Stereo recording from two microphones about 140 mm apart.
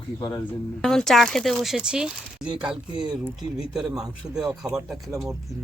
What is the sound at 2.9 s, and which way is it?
Speech, 30° right (ahead or behind).